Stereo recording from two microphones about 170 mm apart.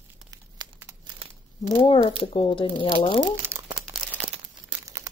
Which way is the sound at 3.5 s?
15° right (ahead or behind).